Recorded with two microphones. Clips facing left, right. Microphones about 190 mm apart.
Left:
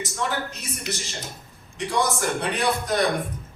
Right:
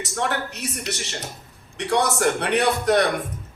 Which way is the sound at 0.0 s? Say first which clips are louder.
Right 2 dB; 70° right (ahead or behind).